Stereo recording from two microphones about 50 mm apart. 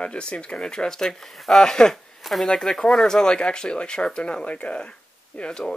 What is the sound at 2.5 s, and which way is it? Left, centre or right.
Speech, centre.